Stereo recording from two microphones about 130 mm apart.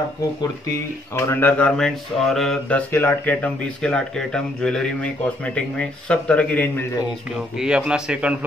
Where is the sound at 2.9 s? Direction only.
15° left (ahead or behind).